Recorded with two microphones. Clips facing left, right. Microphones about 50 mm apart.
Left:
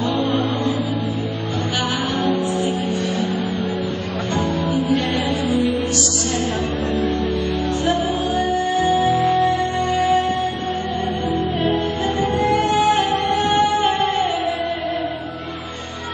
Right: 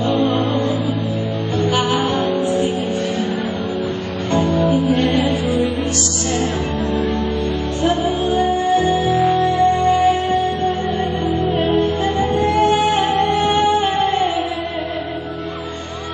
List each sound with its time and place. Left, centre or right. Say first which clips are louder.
0.0 s music: right 3 dB; right
2.1 s music: right 2 dB; right
4.3 s music: right 6 dB; right
7.8 s music: right 5 dB; right
9.1 s music: right 2 dB; centre
9.7 s music: right 5 dB; right
11.3 s music: right 4 dB; right